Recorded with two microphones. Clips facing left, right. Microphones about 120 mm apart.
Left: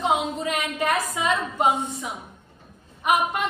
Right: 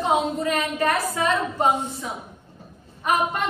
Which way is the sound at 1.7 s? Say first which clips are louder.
Right 1 dB; 25° right (ahead or behind).